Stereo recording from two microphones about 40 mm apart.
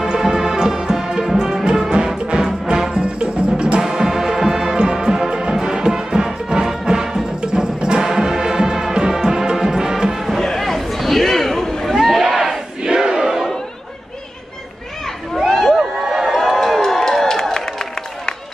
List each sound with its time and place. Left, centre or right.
0.1 s music: centre
3.8 s music: centre
10.4 s chatter: centre
11.9 s a sound: centre
12.3 s battle cry: centre
15.8 s a sound: centre